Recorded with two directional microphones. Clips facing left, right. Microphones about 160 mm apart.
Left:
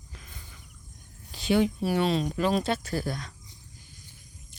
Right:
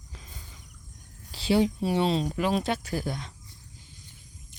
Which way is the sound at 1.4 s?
30° right (ahead or behind).